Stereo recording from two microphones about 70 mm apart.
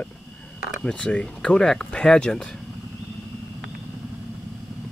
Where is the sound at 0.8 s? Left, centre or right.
Centre.